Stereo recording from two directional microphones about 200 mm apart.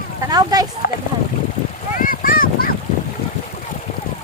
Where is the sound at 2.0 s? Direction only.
45° left (ahead or behind).